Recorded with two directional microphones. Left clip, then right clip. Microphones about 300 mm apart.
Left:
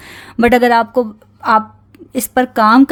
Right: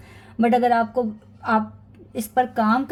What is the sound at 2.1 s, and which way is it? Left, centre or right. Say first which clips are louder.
Speech: left 6 dB; left.